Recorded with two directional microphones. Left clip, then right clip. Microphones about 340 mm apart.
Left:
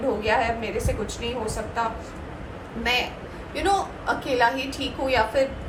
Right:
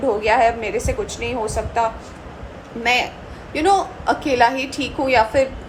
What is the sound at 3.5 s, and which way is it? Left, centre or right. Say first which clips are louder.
A woman's voice: right 7 dB; right.